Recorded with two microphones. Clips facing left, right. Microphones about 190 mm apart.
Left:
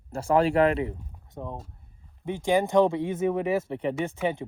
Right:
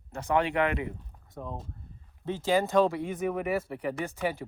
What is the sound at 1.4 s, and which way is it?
Speech, 20° left (ahead or behind).